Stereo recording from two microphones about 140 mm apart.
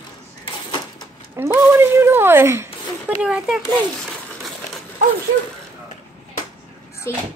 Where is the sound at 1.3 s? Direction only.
20° right (ahead or behind).